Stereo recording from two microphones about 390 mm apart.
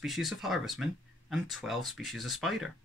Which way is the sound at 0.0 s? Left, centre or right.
Centre.